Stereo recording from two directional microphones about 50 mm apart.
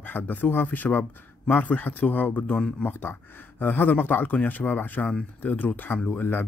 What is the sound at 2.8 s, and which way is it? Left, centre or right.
Speech, left.